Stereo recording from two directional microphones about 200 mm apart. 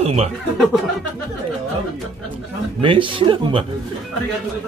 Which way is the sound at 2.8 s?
25° right (ahead or behind).